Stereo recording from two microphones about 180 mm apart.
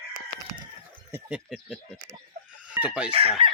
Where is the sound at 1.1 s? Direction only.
5° right (ahead or behind).